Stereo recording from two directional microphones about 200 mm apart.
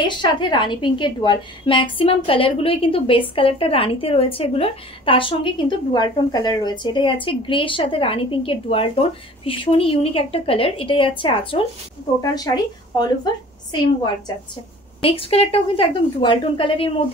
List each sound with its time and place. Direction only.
0.0 s a woman's voice: 25° left (ahead or behind)